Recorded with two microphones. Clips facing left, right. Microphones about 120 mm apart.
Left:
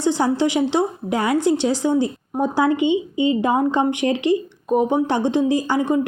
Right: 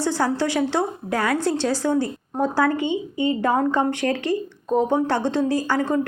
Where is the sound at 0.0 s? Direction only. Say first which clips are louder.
Left 3 dB; 20° left (ahead or behind).